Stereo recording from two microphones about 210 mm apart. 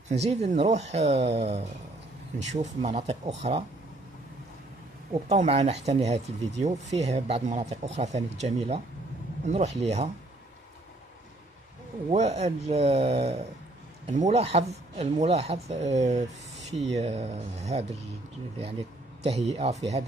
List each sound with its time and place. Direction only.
0.1 s speech: 30° right (ahead or behind)
5.1 s speech: 30° right (ahead or behind)
12.1 s speech: 30° right (ahead or behind)
19.2 s speech: 30° right (ahead or behind)